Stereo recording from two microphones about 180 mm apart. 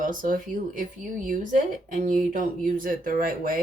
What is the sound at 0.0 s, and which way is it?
Speech, 50° right (ahead or behind).